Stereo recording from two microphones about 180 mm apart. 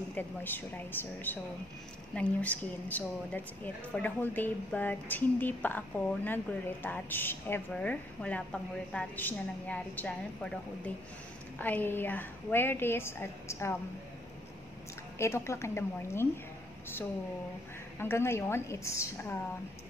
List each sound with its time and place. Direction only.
0.1 s a woman's voice: 10° left (ahead or behind)
15.1 s a woman's voice: 15° left (ahead or behind)
17.9 s a woman's voice: 15° left (ahead or behind)